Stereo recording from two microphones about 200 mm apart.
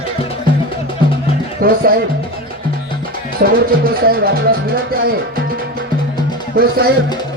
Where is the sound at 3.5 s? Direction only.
45° right (ahead or behind).